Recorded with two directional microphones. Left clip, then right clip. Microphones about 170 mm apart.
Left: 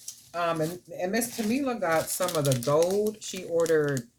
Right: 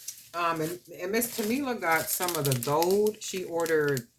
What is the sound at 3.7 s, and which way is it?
Speech, 40° right (ahead or behind).